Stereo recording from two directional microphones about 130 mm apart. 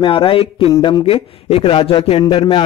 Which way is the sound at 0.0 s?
45° left (ahead or behind).